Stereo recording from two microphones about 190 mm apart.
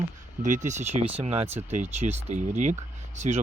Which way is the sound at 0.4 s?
40° right (ahead or behind).